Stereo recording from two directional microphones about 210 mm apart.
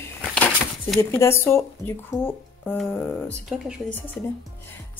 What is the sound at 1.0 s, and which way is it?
Speech, 10° left (ahead or behind).